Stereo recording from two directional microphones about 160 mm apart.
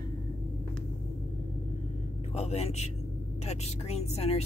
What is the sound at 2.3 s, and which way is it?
Speech, 40° left (ahead or behind).